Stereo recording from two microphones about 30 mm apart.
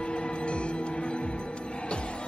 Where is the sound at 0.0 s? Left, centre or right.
Left.